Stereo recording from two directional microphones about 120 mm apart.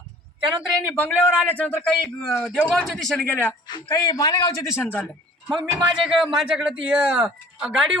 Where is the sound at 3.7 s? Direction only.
35° left (ahead or behind); by 5.0 s 15° left (ahead or behind).